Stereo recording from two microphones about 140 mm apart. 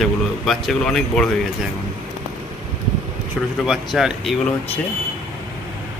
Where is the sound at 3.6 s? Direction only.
Centre (ahead or behind).